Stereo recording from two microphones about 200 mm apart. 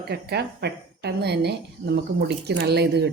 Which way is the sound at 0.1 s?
55° right (ahead or behind).